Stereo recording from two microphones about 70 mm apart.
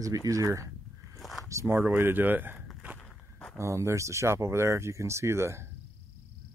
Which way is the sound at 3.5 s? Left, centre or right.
Right.